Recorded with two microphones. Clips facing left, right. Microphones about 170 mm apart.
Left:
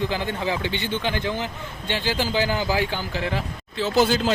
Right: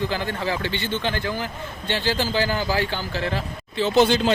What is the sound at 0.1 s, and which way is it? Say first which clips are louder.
Speech: even; 15° left (ahead or behind).